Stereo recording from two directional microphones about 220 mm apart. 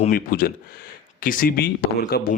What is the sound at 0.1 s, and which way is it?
Speech, 40° left (ahead or behind).